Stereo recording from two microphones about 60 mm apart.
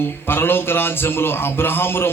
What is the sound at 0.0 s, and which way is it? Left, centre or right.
A man's voice, left.